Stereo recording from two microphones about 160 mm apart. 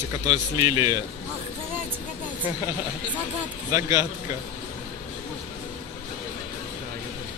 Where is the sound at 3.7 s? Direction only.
20° right (ahead or behind).